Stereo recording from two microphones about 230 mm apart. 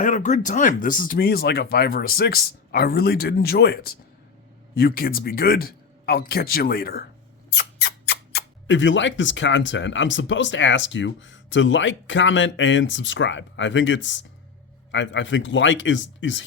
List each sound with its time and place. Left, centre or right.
0.0 s speech: left